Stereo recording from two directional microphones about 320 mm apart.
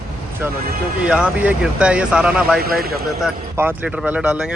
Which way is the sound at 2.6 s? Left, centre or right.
Right.